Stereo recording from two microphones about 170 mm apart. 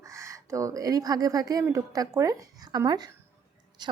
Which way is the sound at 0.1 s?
15° right (ahead or behind).